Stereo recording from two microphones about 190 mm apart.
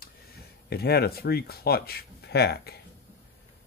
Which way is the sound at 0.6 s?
55° left (ahead or behind).